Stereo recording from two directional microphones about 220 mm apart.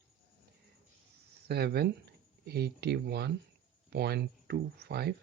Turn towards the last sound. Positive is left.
turn(degrees=-45)  # may be behind; listen again after turning